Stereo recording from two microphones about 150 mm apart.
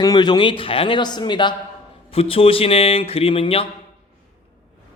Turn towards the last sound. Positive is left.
turn(degrees=40)  # may be behind; listen again after turning